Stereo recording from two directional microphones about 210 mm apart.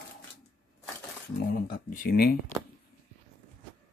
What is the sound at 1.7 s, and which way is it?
Speech, 45° left (ahead or behind).